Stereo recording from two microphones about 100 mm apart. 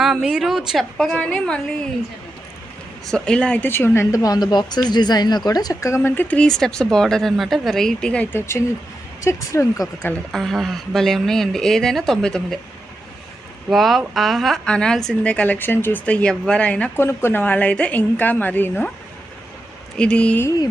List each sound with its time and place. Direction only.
0.0 s a woman's voice: 5° right (ahead or behind)
3.1 s speech: 5° left (ahead or behind)
3.7 s a woman's voice: 25° left (ahead or behind)
6.0 s speech: 20° left (ahead or behind)
6.4 s a woman's voice: 5° left (ahead or behind)
8.3 s a woman's voice: 25° left (ahead or behind)
10.3 s a woman's voice: centre (ahead or behind)
13.7 s a woman's voice: centre (ahead or behind)
17.0 s speech: 25° left (ahead or behind)
20.0 s speech: 10° left (ahead or behind)